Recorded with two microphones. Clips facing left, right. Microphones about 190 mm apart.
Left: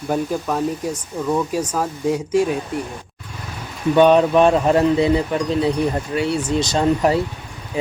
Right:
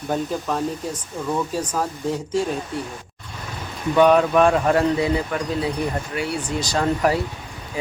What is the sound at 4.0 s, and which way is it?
Speech, 25° left (ahead or behind).